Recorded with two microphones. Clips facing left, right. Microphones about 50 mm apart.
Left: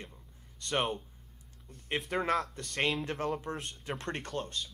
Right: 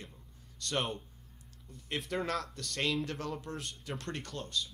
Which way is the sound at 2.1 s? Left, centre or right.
Left.